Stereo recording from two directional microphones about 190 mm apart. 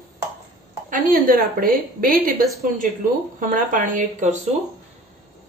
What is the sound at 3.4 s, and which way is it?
Speech, 45° right (ahead or behind).